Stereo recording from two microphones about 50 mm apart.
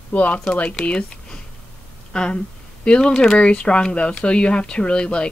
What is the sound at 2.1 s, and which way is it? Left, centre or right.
Speech, centre.